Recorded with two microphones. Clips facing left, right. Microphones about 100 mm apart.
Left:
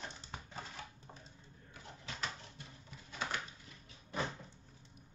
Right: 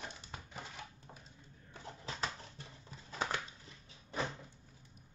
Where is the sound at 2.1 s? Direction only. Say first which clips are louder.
Right 2 dB; 35° right (ahead or behind).